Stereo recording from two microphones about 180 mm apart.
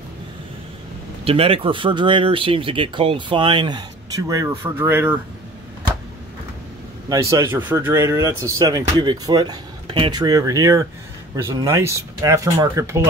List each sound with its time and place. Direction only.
1.2 s speech: 35° right (ahead or behind); by 5.2 s 10° right (ahead or behind)
7.1 s speech: 15° right (ahead or behind)